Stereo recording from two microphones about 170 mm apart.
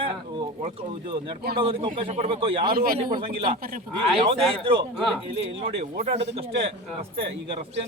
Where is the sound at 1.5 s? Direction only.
30° right (ahead or behind).